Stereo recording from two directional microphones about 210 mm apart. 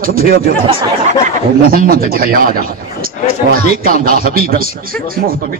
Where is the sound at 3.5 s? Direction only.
45° right (ahead or behind).